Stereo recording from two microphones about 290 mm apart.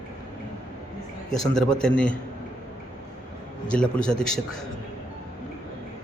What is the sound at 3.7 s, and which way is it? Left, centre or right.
Speech, centre.